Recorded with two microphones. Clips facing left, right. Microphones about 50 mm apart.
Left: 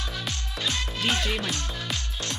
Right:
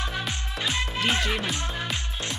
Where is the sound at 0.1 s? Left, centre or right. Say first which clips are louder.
Right 3 dB; centre.